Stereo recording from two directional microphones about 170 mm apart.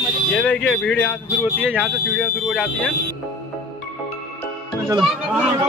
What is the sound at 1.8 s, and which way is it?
Speech, 5° left (ahead or behind).